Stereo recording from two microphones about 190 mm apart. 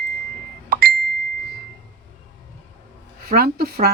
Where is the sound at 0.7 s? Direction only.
55° right (ahead or behind).